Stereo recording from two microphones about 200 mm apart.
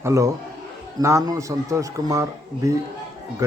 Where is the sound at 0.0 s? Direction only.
15° right (ahead or behind).